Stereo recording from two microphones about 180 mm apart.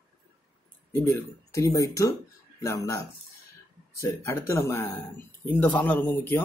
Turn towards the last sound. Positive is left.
turn(degrees=10)  # may be behind; listen again after turning